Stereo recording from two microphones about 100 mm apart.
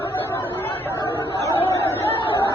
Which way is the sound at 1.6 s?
25° left (ahead or behind).